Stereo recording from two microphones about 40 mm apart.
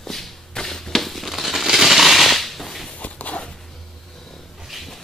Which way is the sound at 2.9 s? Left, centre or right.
Left.